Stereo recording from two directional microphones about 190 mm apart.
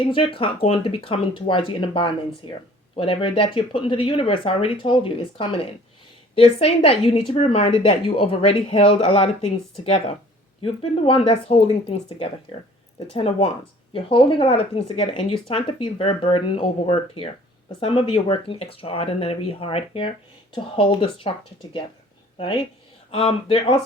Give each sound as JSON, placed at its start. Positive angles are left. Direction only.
{"t": 0.0, "sound": "a woman's voice", "side_deg": 25}
{"t": 10.6, "sound": "a woman's voice", "side_deg": 30}
{"t": 23.1, "sound": "speech", "side_deg": 30}